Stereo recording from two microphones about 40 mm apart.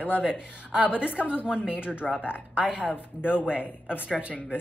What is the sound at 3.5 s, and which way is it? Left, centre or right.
Speech, right.